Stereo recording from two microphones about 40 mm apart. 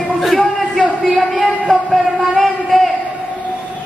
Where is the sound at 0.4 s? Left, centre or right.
Centre.